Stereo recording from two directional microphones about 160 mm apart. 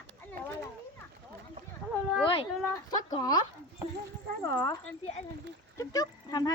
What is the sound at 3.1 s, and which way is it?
Speech, 25° left (ahead or behind).